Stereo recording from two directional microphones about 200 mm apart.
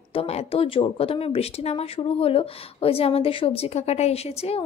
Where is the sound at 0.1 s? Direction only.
30° left (ahead or behind).